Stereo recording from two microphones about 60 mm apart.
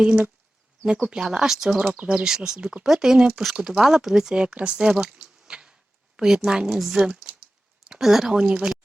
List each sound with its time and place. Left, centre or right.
0.0 s speech: centre
2.0 s speech: right
2.2 s speech: centre